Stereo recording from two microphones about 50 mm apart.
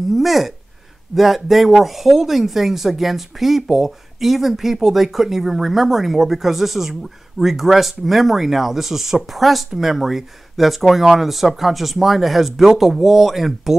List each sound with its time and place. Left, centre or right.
0.1 s speech: centre